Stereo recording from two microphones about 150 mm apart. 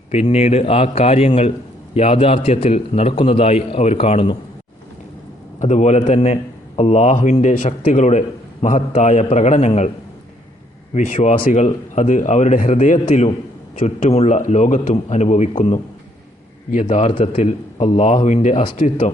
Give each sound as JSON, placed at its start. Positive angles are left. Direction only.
{"t": 0.1, "sound": "a man's voice", "side_deg": 45}
{"t": 5.5, "sound": "a man's voice", "side_deg": 50}
{"t": 10.9, "sound": "a man's voice", "side_deg": 55}